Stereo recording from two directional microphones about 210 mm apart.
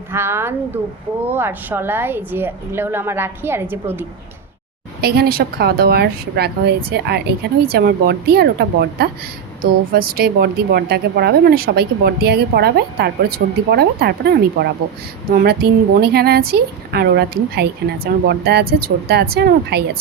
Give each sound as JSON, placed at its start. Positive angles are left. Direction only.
{"t": 0.1, "sound": "a woman's voice", "side_deg": -10}
{"t": 4.9, "sound": "a woman's voice", "side_deg": -45}